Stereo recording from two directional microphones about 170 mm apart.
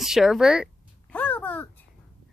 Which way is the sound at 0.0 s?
Centre (ahead or behind).